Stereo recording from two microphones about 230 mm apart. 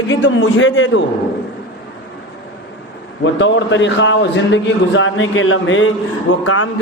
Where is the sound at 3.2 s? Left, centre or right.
Left.